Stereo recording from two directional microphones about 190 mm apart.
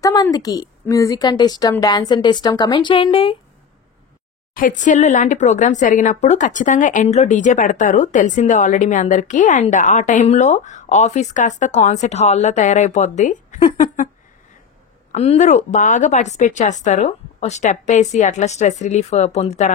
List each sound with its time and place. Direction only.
0.0 s a woman's voice: 20° left (ahead or behind)
4.6 s speech: 40° left (ahead or behind)
15.1 s speech: 35° left (ahead or behind)